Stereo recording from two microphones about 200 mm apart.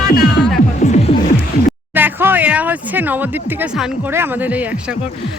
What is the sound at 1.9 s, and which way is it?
Speech, 10° right (ahead or behind).